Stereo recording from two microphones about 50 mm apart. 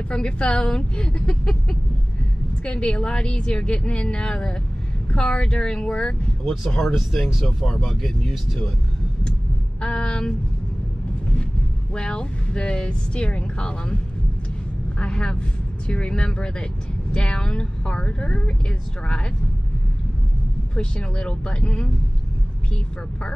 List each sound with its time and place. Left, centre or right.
0.1 s a woman's voice: centre
6.4 s speech: centre
9.8 s a woman's voice: centre
11.9 s speech: centre
15.0 s speech: centre
20.7 s speech: centre